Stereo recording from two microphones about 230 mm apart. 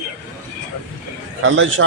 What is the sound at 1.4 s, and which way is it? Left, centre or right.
Speech, right.